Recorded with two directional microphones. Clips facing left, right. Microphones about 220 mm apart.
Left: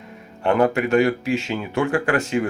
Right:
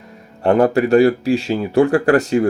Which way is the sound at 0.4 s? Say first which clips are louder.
Right 5 dB; 35° right (ahead or behind).